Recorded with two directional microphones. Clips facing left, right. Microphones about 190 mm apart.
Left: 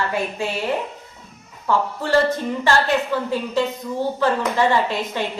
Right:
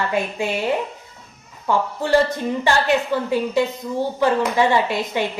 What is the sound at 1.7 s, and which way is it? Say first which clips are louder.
A woman's voice: right 2 dB; 15° right (ahead or behind).